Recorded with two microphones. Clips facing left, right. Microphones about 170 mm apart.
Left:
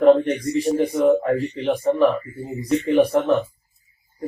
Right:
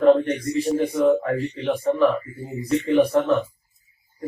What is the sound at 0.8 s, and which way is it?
Speech, 20° left (ahead or behind).